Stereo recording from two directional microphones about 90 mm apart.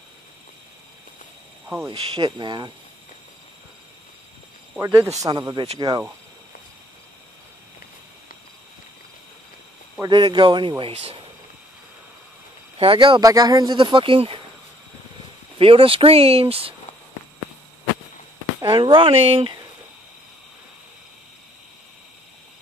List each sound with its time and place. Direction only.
1.9 s speech: 80° right
2.2 s speech: 55° right (ahead or behind)
4.8 s speech: 35° right (ahead or behind)
5.5 s speech: 50° right (ahead or behind)
10.0 s speech: 55° right (ahead or behind)
12.7 s speech: 80° right
13.2 s speech: 45° right (ahead or behind)
13.7 s speech: 70° right (ahead or behind)
15.6 s speech: 90° right
18.7 s speech: 65° right (ahead or behind); by 19.5 s 90° right